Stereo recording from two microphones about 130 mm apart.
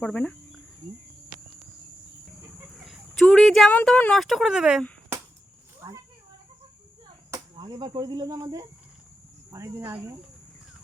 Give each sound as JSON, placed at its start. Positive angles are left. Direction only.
{"t": 0.0, "sound": "cricket", "side_deg": 10}
{"t": 2.7, "sound": "chicken", "side_deg": 0}
{"t": 3.2, "sound": "speech", "side_deg": 5}
{"t": 5.8, "sound": "a sound", "side_deg": -30}
{"t": 7.5, "sound": "speech", "side_deg": -35}